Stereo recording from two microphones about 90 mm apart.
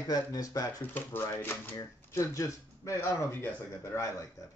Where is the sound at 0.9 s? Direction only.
25° left (ahead or behind).